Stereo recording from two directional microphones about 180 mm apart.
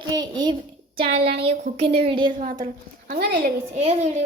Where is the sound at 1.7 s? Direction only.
65° right (ahead or behind).